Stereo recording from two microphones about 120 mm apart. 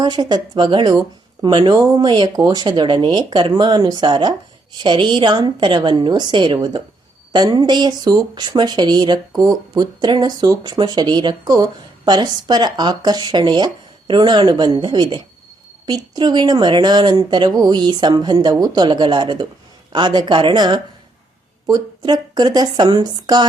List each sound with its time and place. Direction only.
0.0 s speech: 35° right (ahead or behind)